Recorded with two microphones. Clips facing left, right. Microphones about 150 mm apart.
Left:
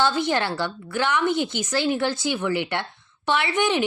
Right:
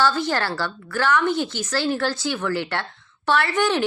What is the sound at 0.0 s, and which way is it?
A woman's voice, 20° left (ahead or behind).